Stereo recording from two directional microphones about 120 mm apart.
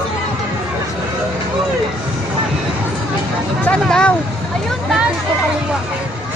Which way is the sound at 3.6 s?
10° left (ahead or behind).